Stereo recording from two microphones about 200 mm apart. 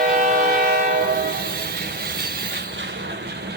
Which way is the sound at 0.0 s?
45° right (ahead or behind).